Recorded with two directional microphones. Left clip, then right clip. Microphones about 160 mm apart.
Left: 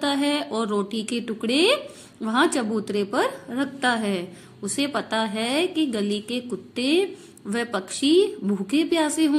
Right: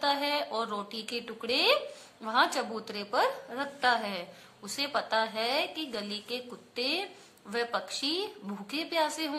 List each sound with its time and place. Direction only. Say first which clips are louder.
0.0 s a woman's voice: left 5 dB; 20° left (ahead or behind)